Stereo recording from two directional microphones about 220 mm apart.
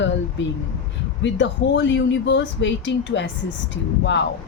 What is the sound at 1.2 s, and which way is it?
Speech, 55° left (ahead or behind).